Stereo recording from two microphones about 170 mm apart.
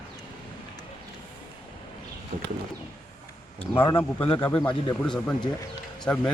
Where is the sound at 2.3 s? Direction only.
50° right (ahead or behind).